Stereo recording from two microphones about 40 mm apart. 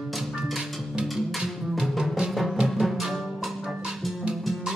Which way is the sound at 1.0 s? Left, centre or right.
Centre.